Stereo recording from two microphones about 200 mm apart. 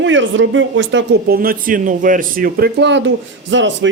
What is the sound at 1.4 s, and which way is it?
Speech, 45° right (ahead or behind).